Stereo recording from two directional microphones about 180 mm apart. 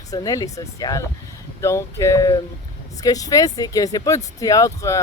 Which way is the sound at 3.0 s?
20° left (ahead or behind).